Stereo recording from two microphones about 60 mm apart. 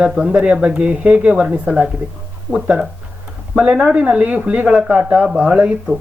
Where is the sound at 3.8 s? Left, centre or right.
Centre.